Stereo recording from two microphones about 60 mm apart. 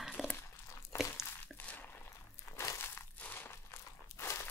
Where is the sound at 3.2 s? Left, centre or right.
Left.